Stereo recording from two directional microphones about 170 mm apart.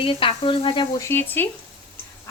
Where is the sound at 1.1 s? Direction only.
10° left (ahead or behind).